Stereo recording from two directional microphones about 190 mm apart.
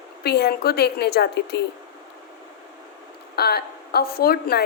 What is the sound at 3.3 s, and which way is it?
Speech, 55° left (ahead or behind).